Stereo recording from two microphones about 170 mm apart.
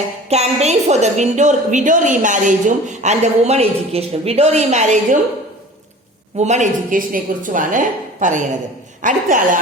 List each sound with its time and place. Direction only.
0.3 s a woman's voice: 40° right (ahead or behind)
6.3 s a woman's voice: 40° right (ahead or behind)